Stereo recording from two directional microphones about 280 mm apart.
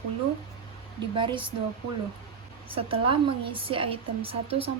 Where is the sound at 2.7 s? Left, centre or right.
Centre.